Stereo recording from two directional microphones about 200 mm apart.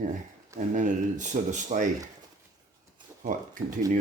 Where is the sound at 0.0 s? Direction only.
40° right (ahead or behind).